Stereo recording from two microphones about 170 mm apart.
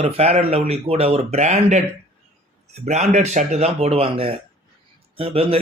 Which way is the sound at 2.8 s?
40° right (ahead or behind).